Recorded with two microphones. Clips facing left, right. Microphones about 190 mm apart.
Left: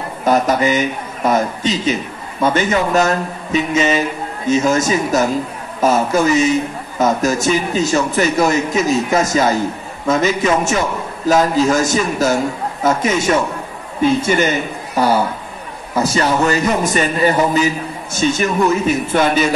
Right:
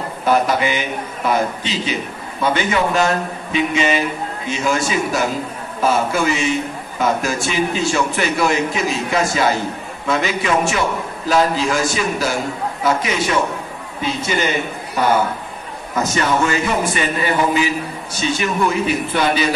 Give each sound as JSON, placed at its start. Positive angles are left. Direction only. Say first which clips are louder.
{"t": 0.2, "sound": "a man's voice", "louder": "left 2 dB", "side_deg": 40}
{"t": 15.9, "sound": "a man's voice", "louder": "left 2 dB", "side_deg": 35}